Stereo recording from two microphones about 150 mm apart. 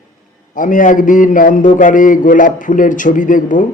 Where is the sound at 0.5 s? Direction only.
60° left (ahead or behind).